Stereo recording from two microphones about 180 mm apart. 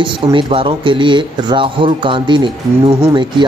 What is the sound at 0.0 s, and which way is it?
Speech, 25° right (ahead or behind).